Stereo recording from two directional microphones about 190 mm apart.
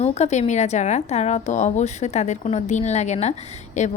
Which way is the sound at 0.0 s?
35° left (ahead or behind).